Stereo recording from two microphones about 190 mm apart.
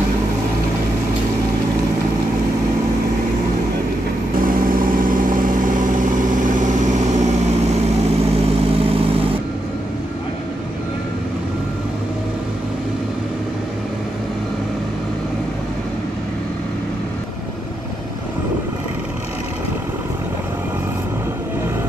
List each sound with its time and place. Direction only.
4.4 s vehicle: 50° right (ahead or behind)
8.7 s vehicle: 30° right (ahead or behind)